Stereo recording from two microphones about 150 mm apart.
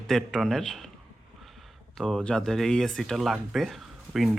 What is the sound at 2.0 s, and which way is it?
Speech, centre (ahead or behind).